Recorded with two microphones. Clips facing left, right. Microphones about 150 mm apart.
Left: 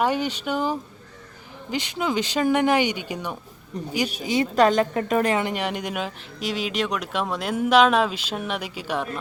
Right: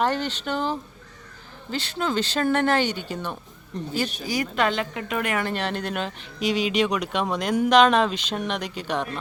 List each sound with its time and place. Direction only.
0.0 s speech: 10° left (ahead or behind)
4.5 s a woman's voice: 40° left (ahead or behind)
5.4 s speech: 15° left (ahead or behind)